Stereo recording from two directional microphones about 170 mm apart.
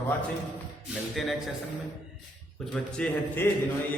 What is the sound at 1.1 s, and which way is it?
Speech, centre (ahead or behind).